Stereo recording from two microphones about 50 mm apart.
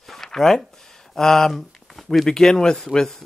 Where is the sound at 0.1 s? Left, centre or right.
Centre.